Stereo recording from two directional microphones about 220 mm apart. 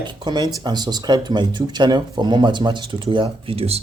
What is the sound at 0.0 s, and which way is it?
Speech, 20° right (ahead or behind).